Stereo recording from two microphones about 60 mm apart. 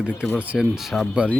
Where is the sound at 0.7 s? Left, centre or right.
Centre.